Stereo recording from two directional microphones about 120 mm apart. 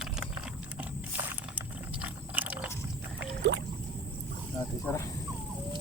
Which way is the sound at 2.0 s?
10° right (ahead or behind).